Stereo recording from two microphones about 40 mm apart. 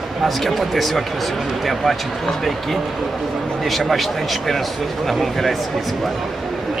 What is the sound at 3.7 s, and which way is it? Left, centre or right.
Speech, centre.